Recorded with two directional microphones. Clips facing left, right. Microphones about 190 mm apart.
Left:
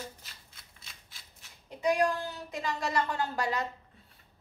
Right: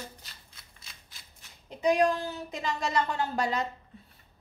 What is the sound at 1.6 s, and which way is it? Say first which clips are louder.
A woman's voice: right 3 dB; 20° right (ahead or behind).